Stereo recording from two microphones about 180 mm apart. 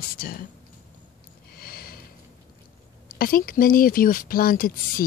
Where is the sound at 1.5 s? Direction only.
55° left (ahead or behind).